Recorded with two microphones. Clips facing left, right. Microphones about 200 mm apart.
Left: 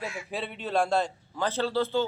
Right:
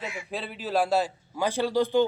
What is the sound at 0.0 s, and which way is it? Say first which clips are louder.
A man's voice: even; centre (ahead or behind).